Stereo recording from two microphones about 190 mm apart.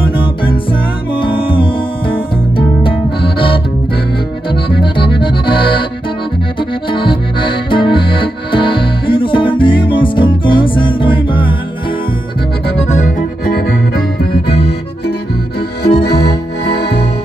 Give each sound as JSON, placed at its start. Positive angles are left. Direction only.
{"t": 0.1, "sound": "music", "side_deg": 25}
{"t": 4.5, "sound": "accordion", "side_deg": 25}
{"t": 6.9, "sound": "accordion", "side_deg": 25}
{"t": 12.6, "sound": "accordion", "side_deg": 35}